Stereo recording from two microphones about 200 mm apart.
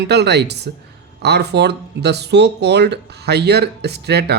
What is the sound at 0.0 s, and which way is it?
Speech, 55° right (ahead or behind).